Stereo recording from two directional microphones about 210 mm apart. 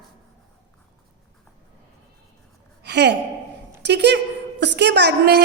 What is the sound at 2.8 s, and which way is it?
A woman's voice, 55° right (ahead or behind).